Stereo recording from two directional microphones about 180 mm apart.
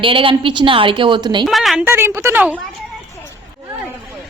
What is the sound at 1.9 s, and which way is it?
Speech, 15° right (ahead or behind).